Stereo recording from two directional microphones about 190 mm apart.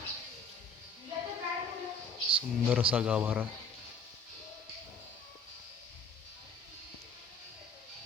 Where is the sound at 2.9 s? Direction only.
5° right (ahead or behind).